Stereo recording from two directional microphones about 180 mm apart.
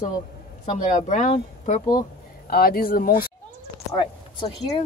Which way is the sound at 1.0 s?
40° left (ahead or behind).